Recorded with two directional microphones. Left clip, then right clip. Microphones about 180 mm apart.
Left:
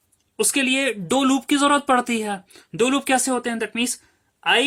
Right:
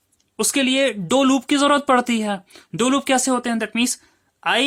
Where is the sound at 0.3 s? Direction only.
30° right (ahead or behind).